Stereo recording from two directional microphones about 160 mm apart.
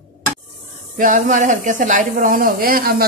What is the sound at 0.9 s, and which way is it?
Speech, 55° right (ahead or behind).